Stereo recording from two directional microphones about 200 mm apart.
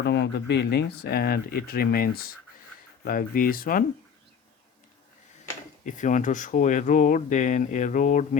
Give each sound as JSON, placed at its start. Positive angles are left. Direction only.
{"t": 0.0, "sound": "speech", "side_deg": 55}
{"t": 5.8, "sound": "speech", "side_deg": 40}